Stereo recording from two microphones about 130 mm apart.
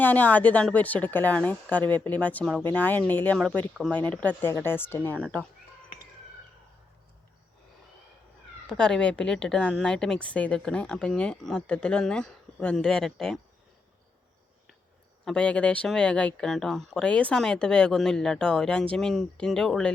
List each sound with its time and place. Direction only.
0.0 s a woman's voice: 10° left (ahead or behind)
8.6 s a woman's voice: 5° left (ahead or behind)
15.2 s speech: 5° left (ahead or behind)